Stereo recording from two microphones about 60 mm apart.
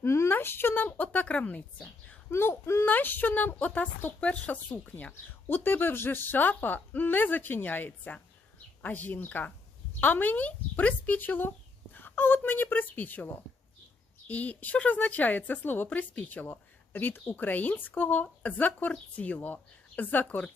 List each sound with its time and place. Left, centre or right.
0.0 s a sound: left
0.3 s a woman's voice: left
2.3 s speech: left
2.8 s a woman's voice: left
14.3 s a woman's voice: left